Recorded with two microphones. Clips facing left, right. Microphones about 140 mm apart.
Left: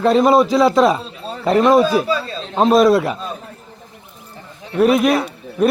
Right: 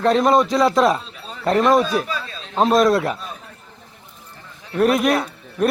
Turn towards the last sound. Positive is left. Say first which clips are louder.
# left 3 dB
turn(degrees=0)  # may be behind; listen again after turning